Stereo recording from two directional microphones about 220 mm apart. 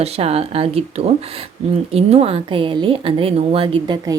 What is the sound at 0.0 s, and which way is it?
Speech, 30° right (ahead or behind).